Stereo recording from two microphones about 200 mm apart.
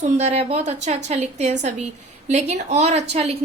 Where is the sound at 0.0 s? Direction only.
35° right (ahead or behind).